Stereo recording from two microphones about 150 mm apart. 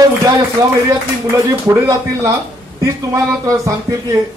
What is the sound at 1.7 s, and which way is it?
A man's voice, 20° right (ahead or behind).